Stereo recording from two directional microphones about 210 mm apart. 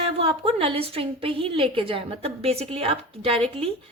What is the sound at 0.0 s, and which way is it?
A woman's voice, 25° right (ahead or behind).